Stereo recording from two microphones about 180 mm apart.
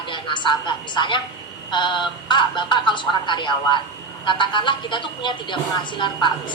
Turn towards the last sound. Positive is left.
turn(degrees=25)  # may be behind; listen again after turning